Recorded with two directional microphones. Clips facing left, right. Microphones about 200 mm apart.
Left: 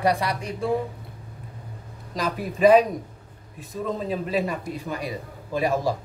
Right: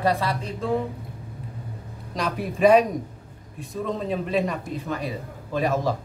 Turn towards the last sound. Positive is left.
turn(degrees=10)  # may be behind; listen again after turning